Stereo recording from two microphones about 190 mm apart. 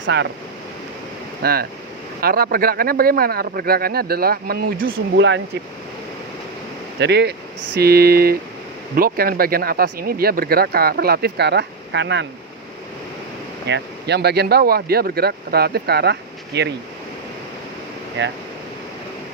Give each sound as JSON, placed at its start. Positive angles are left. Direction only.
{"t": 0.0, "sound": "speech", "side_deg": -65}
{"t": 1.4, "sound": "speech", "side_deg": -55}
{"t": 7.0, "sound": "speech", "side_deg": -60}
{"t": 13.7, "sound": "speech", "side_deg": -65}
{"t": 18.2, "sound": "speech", "side_deg": -70}